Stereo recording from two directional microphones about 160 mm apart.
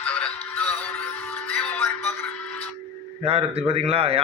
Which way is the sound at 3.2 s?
35° right (ahead or behind).